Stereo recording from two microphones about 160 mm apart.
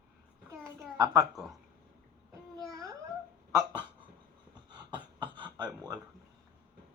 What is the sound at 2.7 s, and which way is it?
Cat, 20° right (ahead or behind).